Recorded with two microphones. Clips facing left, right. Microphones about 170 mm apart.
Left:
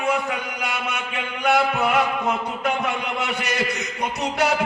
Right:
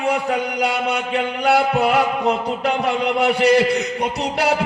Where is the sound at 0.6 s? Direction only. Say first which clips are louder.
Right 7 dB; 35° right (ahead or behind).